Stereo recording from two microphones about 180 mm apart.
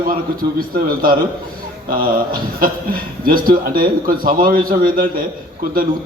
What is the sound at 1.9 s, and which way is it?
A man's voice, 55° right (ahead or behind).